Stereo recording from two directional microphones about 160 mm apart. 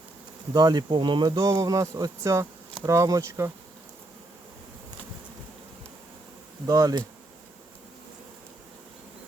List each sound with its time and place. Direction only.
0.5 s speech: 25° right (ahead or behind)
6.7 s speech: 25° right (ahead or behind)